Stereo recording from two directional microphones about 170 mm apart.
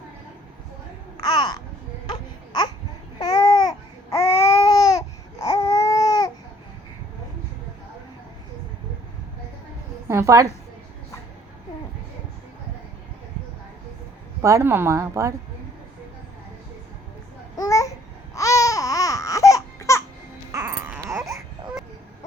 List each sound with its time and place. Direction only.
1.2 s babbling: 25° left (ahead or behind)
3.2 s babbling: 25° left (ahead or behind)
4.2 s babbling: 35° left (ahead or behind)
4.6 s babbling: 20° left (ahead or behind)
10.1 s a woman's voice: 15° right (ahead or behind)
14.4 s a woman's voice: 15° right (ahead or behind)
17.6 s babbling: 20° left (ahead or behind)
18.3 s baby cry: 20° left (ahead or behind)
20.5 s baby cry: 15° right (ahead or behind)